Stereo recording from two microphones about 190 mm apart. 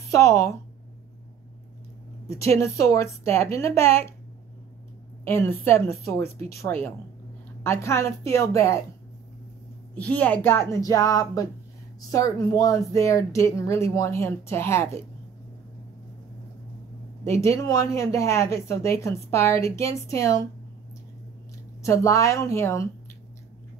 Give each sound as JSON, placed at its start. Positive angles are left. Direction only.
{"t": 0.1, "sound": "speech", "side_deg": 15}
{"t": 2.2, "sound": "speech", "side_deg": 15}
{"t": 5.2, "sound": "speech", "side_deg": 10}
{"t": 9.9, "sound": "speech", "side_deg": 5}
{"t": 17.2, "sound": "speech", "side_deg": 15}
{"t": 21.8, "sound": "speech", "side_deg": 15}